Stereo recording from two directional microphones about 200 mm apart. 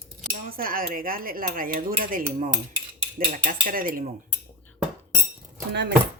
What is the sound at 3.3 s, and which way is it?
Speech, 45° right (ahead or behind).